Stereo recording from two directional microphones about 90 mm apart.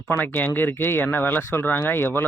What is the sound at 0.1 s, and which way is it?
Speech, 20° left (ahead or behind).